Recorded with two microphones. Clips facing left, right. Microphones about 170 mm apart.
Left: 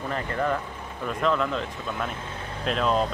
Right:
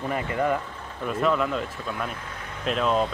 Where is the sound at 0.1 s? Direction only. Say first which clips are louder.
Right 2 dB; 10° right (ahead or behind).